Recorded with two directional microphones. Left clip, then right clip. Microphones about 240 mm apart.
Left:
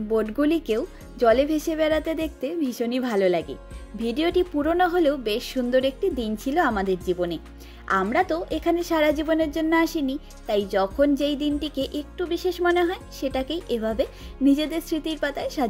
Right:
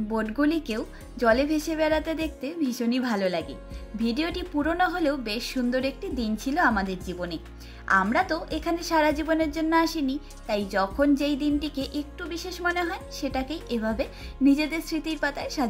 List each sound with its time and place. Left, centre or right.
0.1 s speech: left